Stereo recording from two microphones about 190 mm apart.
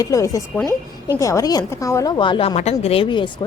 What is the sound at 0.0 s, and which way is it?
A woman's voice, 15° left (ahead or behind).